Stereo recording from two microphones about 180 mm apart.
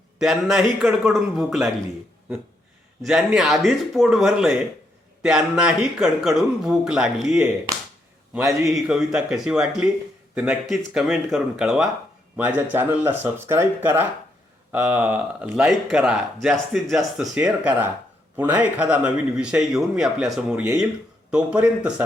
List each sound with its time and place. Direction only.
0.2 s speech: centre (ahead or behind)
3.0 s speech: centre (ahead or behind)
8.6 s speech: centre (ahead or behind)